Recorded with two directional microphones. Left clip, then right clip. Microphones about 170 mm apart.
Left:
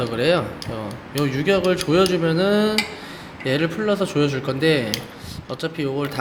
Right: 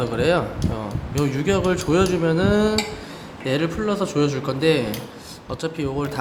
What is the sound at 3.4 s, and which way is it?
Speech, 15° left (ahead or behind).